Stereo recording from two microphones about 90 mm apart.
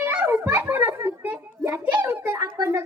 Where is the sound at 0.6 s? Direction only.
20° right (ahead or behind).